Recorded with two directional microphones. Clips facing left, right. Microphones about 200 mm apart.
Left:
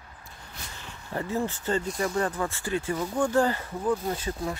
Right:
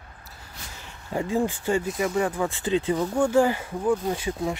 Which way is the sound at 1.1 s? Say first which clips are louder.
Right 4 dB; 15° right (ahead or behind).